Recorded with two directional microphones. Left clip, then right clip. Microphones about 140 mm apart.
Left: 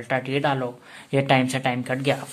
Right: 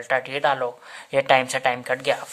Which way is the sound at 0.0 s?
30° right (ahead or behind).